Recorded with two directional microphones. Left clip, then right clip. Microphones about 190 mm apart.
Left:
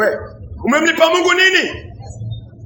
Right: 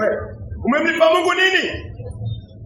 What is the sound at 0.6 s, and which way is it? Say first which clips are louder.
A man's voice: left 3 dB; 35° left (ahead or behind).